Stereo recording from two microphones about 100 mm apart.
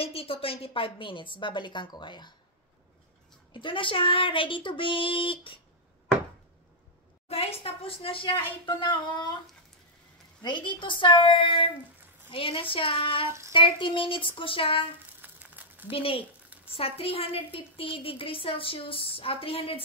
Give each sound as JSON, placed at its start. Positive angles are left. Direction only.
{"t": 0.0, "sound": "a woman's voice", "side_deg": 70}
{"t": 3.5, "sound": "a woman's voice", "side_deg": 55}
{"t": 7.2, "sound": "a woman's voice", "side_deg": 80}
{"t": 8.6, "sound": "speech", "side_deg": 45}
{"t": 10.4, "sound": "a woman's voice", "side_deg": 50}
{"t": 15.2, "sound": "a sound", "side_deg": -20}
{"t": 15.9, "sound": "a woman's voice", "side_deg": 65}